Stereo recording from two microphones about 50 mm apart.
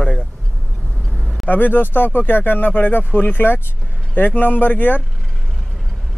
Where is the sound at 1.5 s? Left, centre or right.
Left.